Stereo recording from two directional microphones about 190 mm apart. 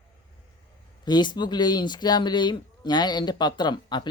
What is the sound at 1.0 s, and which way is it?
Speech, 25° left (ahead or behind).